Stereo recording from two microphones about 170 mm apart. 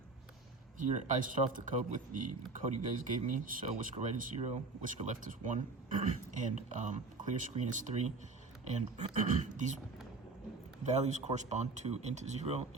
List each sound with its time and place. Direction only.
0.8 s speech: 45° right (ahead or behind)
10.8 s speech: 40° right (ahead or behind)